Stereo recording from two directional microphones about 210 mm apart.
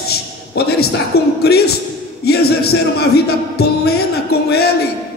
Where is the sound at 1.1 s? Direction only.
50° left (ahead or behind).